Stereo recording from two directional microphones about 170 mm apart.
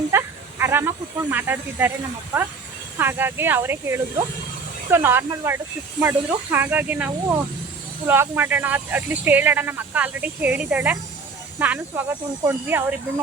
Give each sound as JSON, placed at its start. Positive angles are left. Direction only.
{"t": 0.1, "sound": "speech", "side_deg": -15}
{"t": 3.0, "sound": "speech", "side_deg": -15}